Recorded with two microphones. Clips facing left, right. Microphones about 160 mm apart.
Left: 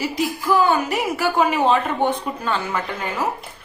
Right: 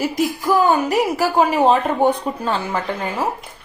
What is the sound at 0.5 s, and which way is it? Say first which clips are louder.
A woman's voice: right 2 dB; 40° right (ahead or behind).